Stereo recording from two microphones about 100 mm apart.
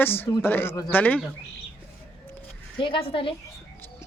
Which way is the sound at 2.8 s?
60° left (ahead or behind).